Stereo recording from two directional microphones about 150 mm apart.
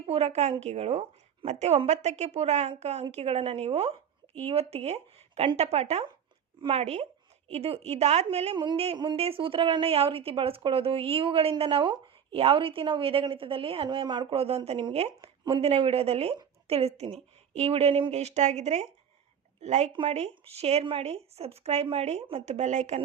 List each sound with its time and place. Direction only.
0.1 s a woman's voice: 45° right (ahead or behind)
8.5 s a woman's voice: 30° right (ahead or behind); by 19.9 s 50° right (ahead or behind)
19.9 s a woman's voice: 35° right (ahead or behind)